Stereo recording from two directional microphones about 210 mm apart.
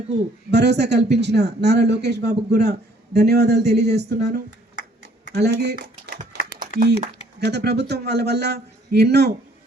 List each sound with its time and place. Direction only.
0.5 s speech: 50° right (ahead or behind)